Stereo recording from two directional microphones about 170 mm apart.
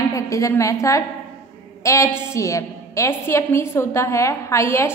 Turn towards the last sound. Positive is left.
turn(degrees=15)  # may be behind; listen again after turning